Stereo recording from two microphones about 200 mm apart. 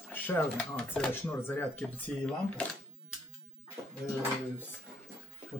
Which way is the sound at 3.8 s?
20° right (ahead or behind).